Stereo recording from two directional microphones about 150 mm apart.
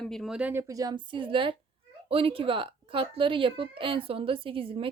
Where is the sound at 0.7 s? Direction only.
25° right (ahead or behind).